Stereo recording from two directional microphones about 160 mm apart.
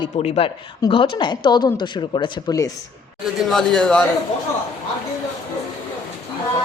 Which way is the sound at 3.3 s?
Centre (ahead or behind).